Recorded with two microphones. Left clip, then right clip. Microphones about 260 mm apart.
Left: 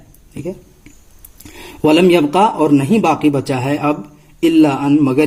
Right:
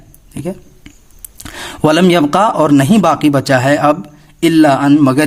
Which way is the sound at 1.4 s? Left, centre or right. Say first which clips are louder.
Right 2 dB; right.